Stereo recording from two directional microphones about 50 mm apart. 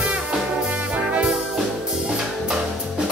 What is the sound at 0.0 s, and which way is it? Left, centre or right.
Music, centre.